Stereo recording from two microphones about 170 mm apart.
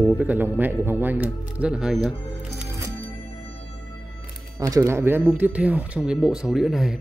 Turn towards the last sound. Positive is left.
turn(degrees=0)  # may be behind; listen again after turning